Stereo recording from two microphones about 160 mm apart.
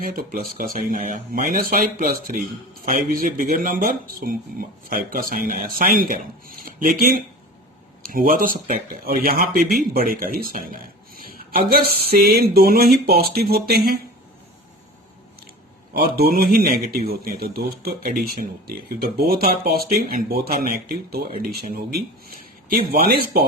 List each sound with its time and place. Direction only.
0.0 s a man's voice: 60° right (ahead or behind)
8.1 s a man's voice: 60° right (ahead or behind)
16.0 s speech: 70° right (ahead or behind)